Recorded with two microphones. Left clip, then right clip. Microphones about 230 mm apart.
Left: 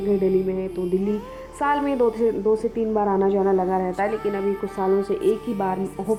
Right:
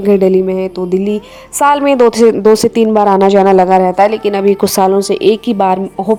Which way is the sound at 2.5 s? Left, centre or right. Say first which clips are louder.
Right 13 dB; right.